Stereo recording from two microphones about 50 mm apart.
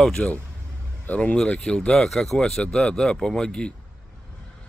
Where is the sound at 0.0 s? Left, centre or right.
Centre.